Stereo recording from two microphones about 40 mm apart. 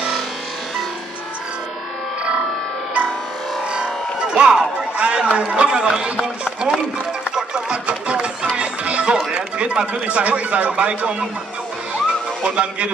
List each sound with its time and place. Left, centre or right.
3.7 s a sound: right
6.2 s speech: centre
7.3 s music: centre
7.8 s run: right
8.5 s music: right
9.3 s a man's voice: right
12.4 s a man's voice: right